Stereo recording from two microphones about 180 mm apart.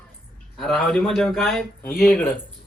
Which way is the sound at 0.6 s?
Centre (ahead or behind).